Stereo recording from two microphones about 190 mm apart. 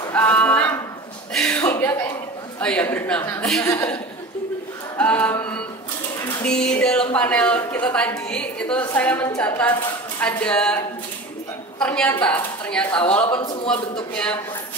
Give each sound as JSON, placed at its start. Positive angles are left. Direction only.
{"t": 0.1, "sound": "a sound", "side_deg": 10}
{"t": 2.6, "sound": "a woman's voice", "side_deg": 5}
{"t": 4.9, "sound": "music", "side_deg": 10}
{"t": 6.2, "sound": "a woman's voice", "side_deg": 5}
{"t": 11.8, "sound": "speech", "side_deg": 5}
{"t": 13.3, "sound": "speech", "side_deg": 25}
{"t": 14.1, "sound": "speech", "side_deg": 5}